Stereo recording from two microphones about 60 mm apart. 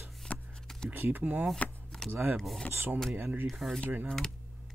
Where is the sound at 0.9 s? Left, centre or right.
Right.